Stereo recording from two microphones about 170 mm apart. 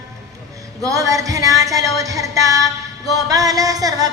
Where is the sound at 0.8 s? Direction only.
20° right (ahead or behind).